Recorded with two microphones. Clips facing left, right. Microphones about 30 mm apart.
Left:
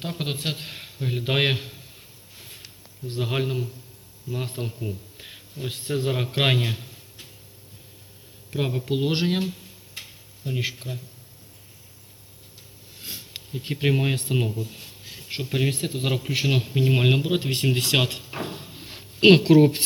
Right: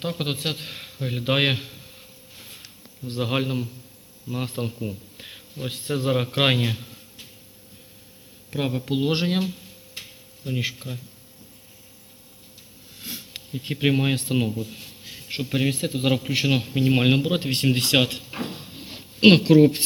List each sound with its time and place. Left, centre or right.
0.0 s a man's voice: centre
0.5 s a sound: centre
3.1 s a man's voice: centre
8.5 s a man's voice: centre
10.4 s speech: centre
13.6 s a man's voice: centre
18.3 s a sound: centre
19.2 s a man's voice: centre
19.5 s speech: centre